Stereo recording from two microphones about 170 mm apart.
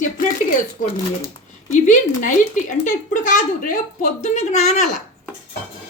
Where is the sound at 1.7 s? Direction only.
45° left (ahead or behind).